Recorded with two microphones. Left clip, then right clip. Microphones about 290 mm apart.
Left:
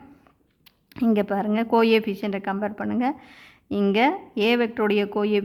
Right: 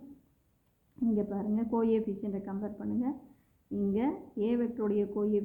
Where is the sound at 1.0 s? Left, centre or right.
Left.